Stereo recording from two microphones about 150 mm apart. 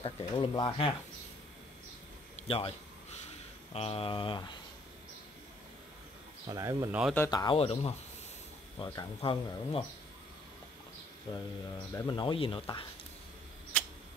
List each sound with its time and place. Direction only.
0.0 s speech: 35° left (ahead or behind)
2.3 s a sound: 40° left (ahead or behind)
3.7 s speech: 40° left (ahead or behind)
6.4 s speech: 25° right (ahead or behind)
6.9 s speech: 5° right (ahead or behind)
7.2 s speech: 25° left (ahead or behind)
7.5 s speech: 40° left (ahead or behind)
8.7 s speech: 25° left (ahead or behind)
9.2 s speech: 35° left (ahead or behind)
11.3 s speech: 35° left (ahead or behind)
11.9 s speech: 20° left (ahead or behind)
12.2 s speech: 35° left (ahead or behind)